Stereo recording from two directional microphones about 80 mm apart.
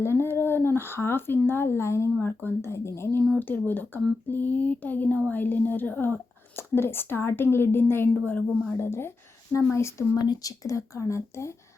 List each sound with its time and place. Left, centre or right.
0.0 s speech: left
8.8 s speech: left
10.2 s speech: left